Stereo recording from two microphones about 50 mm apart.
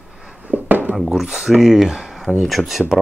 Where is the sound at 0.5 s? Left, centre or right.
Right.